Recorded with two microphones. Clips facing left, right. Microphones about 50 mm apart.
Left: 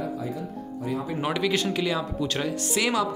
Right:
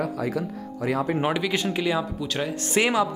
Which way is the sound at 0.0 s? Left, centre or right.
Right.